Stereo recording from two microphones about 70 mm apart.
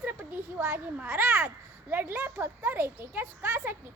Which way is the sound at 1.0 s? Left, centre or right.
Right.